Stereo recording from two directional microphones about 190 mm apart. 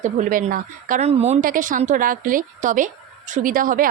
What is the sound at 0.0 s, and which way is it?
A woman's voice, 40° right (ahead or behind).